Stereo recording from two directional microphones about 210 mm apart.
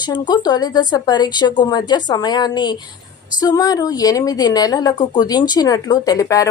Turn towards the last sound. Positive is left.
turn(degrees=15)  # may be behind; listen again after turning